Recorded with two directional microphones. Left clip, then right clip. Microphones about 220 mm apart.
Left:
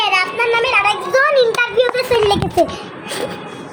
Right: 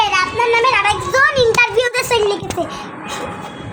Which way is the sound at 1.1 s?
30° right (ahead or behind).